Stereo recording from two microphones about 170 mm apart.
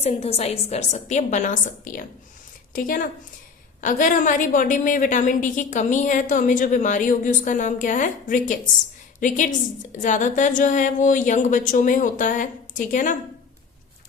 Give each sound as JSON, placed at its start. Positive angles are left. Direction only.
{"t": 0.0, "sound": "a woman's voice", "side_deg": 40}